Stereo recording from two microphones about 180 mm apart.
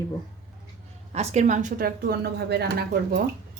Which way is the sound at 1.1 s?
40° right (ahead or behind).